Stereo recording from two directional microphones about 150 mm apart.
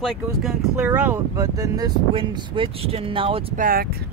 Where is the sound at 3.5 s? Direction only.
70° right (ahead or behind); by 4.1 s 90° right.